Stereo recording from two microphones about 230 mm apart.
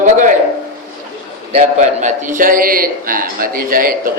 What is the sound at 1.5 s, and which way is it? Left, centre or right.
A man's voice, right.